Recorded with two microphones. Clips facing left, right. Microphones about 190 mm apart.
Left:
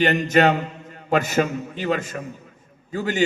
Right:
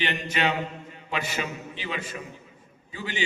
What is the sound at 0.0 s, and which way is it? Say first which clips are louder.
A man's voice: left 10 dB; 45° left (ahead or behind).